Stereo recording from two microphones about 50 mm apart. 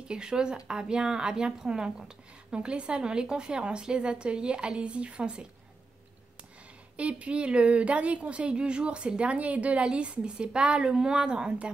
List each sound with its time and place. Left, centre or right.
0.1 s a woman's voice: centre
7.0 s speech: right